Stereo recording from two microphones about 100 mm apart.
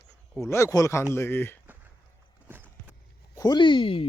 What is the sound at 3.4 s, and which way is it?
Speech, 45° left (ahead or behind).